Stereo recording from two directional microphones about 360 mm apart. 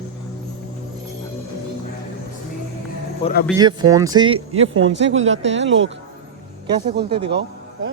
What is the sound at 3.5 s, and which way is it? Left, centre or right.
Speech, centre.